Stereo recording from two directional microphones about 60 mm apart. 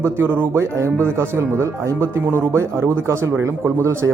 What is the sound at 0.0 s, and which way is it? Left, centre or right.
Speech, right.